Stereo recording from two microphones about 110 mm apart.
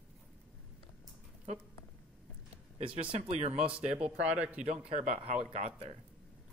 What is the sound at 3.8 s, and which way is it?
Speech, 10° right (ahead or behind).